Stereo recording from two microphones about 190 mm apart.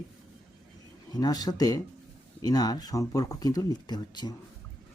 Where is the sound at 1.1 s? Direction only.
20° left (ahead or behind).